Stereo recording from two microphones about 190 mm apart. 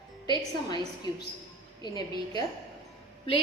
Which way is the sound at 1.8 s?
20° left (ahead or behind).